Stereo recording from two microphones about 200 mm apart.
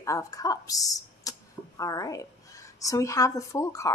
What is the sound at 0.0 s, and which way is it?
A woman's voice, 15° left (ahead or behind).